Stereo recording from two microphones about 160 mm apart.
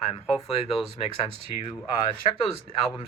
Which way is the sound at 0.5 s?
40° left (ahead or behind).